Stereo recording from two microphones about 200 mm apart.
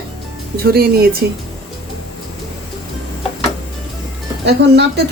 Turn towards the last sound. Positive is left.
turn(degrees=-55)  # may be behind; listen again after turning